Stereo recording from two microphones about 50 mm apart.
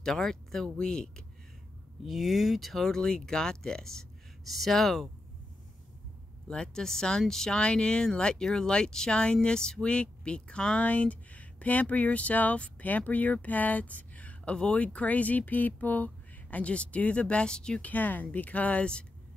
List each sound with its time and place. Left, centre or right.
0.0 s speech: centre
2.0 s speech: centre
6.4 s speech: centre
17.8 s speech: left